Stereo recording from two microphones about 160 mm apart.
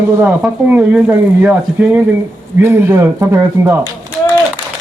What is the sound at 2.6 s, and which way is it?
Speech, 15° right (ahead or behind).